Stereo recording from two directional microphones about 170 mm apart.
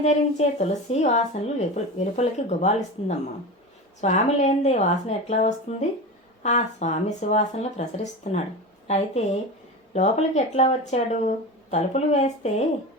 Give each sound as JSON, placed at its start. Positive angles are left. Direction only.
{"t": 0.0, "sound": "speech", "side_deg": 40}